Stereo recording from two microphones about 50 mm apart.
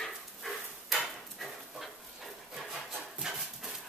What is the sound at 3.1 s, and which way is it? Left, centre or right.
Dog, centre.